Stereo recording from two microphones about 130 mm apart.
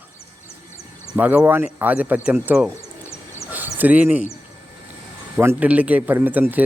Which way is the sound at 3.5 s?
15° right (ahead or behind).